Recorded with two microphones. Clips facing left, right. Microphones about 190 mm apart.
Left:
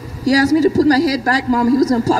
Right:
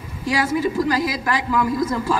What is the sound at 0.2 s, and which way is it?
Speech, 40° left (ahead or behind).